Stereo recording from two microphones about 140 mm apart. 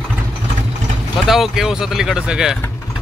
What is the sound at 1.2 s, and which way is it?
Speech, centre (ahead or behind).